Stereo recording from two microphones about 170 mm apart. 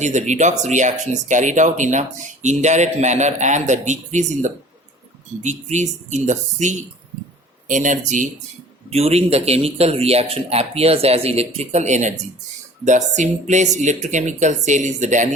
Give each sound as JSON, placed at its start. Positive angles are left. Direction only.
{"t": 0.0, "sound": "speech", "side_deg": -45}
{"t": 8.9, "sound": "speech", "side_deg": -35}